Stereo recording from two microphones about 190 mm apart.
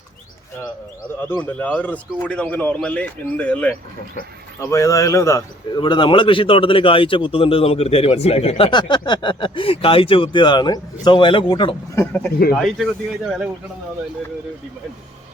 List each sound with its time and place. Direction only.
1.3 s a man's voice: 10° left (ahead or behind); by 11.8 s 25° left (ahead or behind)
11.9 s a man's voice: 10° left (ahead or behind)